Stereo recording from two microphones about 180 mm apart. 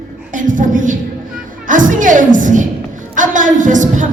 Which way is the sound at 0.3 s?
45° right (ahead or behind).